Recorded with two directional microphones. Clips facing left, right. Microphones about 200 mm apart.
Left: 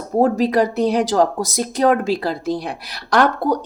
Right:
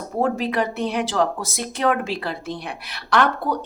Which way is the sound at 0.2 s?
40° left (ahead or behind).